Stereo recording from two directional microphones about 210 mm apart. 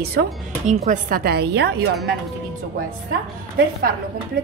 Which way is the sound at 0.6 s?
35° right (ahead or behind).